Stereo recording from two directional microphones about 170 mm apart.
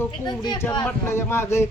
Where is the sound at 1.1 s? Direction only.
15° left (ahead or behind).